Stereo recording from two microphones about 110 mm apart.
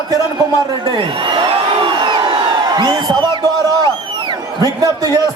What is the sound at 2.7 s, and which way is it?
A man's voice, 40° right (ahead or behind).